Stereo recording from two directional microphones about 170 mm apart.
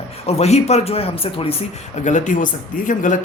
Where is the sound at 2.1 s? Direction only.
45° left (ahead or behind).